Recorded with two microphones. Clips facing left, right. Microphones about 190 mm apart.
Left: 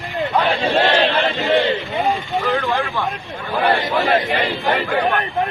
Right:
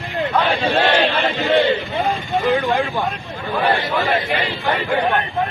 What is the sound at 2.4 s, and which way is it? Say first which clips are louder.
Speech: right 4 dB; 20° right (ahead or behind).